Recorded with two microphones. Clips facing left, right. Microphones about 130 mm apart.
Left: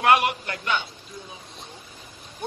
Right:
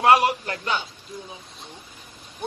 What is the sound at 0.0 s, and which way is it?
Speech, 30° right (ahead or behind).